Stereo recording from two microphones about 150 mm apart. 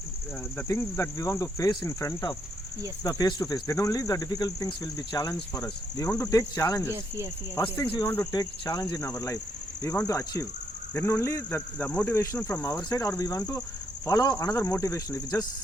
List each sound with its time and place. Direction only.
0.5 s speech: 20° left (ahead or behind)
8.0 s speech: 15° left (ahead or behind)
8.3 s speech: 25° left (ahead or behind)